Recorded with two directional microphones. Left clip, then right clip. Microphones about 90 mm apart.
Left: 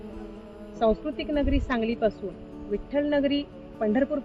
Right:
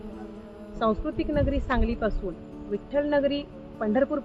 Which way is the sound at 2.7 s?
Centre (ahead or behind).